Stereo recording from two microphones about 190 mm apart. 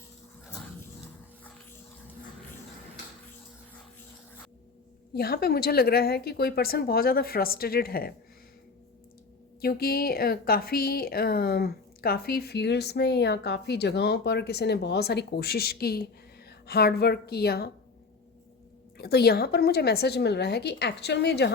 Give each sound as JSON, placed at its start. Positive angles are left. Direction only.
{"t": 5.1, "sound": "speech", "side_deg": 55}
{"t": 9.6, "sound": "a woman's voice", "side_deg": 55}
{"t": 18.9, "sound": "a woman's voice", "side_deg": 55}